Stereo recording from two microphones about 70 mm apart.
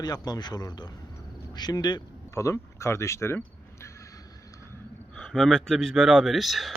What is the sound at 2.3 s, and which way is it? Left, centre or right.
Speech, left.